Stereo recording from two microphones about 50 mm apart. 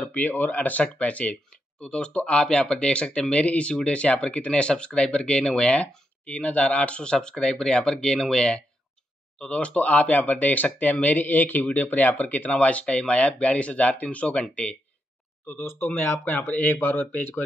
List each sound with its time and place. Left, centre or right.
0.0 s speech: left
15.4 s speech: left